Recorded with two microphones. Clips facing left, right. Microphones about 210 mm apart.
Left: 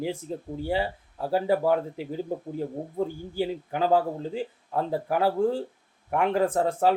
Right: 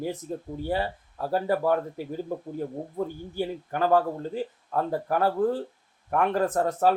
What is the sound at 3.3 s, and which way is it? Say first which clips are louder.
Speech: left 1 dB; 15° left (ahead or behind).